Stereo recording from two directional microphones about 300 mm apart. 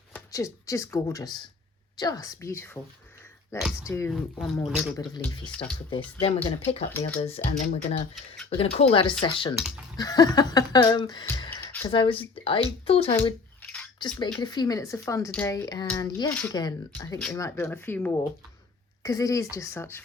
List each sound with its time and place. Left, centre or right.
0.1 s speech: centre
4.9 s speech: centre